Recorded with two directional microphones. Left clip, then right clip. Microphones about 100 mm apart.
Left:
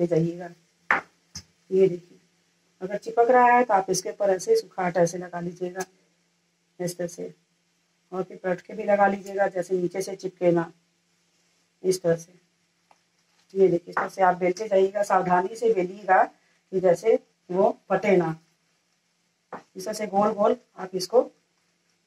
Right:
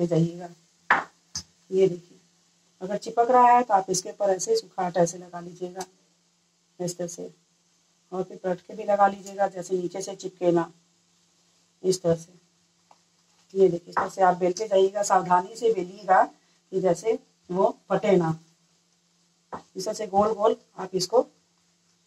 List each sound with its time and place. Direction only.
0.0 s a sound: 30° left (ahead or behind)
2.8 s a woman's voice: 35° left (ahead or behind)
11.8 s a woman's voice: 35° left (ahead or behind)
13.5 s a woman's voice: 30° left (ahead or behind)
19.8 s a woman's voice: 30° left (ahead or behind)